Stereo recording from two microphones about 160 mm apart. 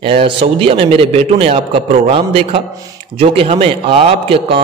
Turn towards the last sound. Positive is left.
turn(degrees=-35)  # may be behind; listen again after turning